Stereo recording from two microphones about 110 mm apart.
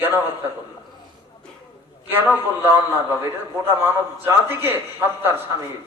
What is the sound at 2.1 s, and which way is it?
A man's voice, 20° right (ahead or behind).